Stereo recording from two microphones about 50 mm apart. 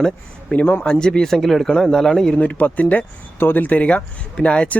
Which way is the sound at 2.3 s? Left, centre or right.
Left.